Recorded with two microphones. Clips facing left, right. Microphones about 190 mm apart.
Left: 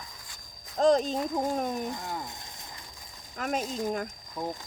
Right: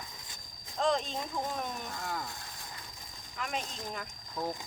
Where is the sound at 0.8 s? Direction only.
40° left (ahead or behind).